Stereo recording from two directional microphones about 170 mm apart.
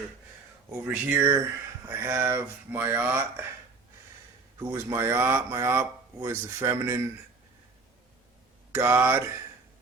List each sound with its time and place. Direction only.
0.7 s speech: 10° right (ahead or behind)
4.6 s speech: 15° right (ahead or behind)
8.7 s speech: 15° right (ahead or behind)